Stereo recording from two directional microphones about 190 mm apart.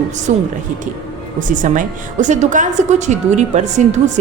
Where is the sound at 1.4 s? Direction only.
40° right (ahead or behind).